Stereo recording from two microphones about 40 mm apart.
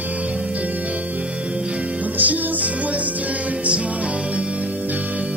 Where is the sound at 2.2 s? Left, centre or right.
Right.